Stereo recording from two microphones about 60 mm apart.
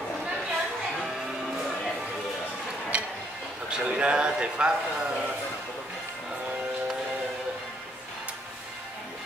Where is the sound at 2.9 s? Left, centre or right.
Centre.